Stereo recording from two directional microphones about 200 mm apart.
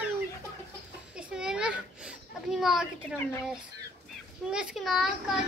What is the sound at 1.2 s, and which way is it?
Speech, 5° right (ahead or behind).